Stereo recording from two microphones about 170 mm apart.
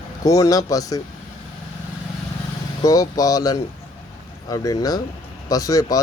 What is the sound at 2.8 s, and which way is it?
Speech, 20° left (ahead or behind).